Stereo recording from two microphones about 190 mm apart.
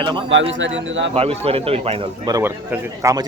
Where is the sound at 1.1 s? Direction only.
30° right (ahead or behind).